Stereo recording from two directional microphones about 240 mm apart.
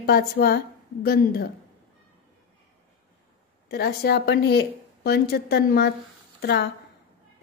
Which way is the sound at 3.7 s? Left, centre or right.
Left.